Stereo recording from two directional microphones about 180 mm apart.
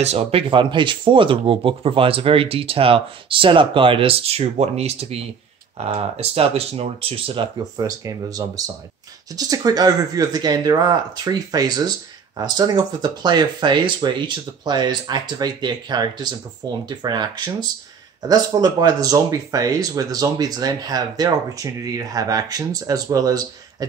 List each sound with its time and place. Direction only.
0.0 s speech: 35° right (ahead or behind)